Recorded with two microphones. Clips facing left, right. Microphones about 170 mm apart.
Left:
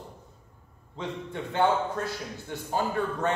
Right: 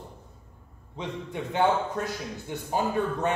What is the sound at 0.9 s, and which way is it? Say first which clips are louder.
A man's voice: right 1 dB; 15° right (ahead or behind).